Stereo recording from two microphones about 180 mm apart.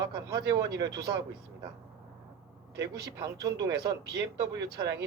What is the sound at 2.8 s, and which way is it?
Speech, 20° right (ahead or behind).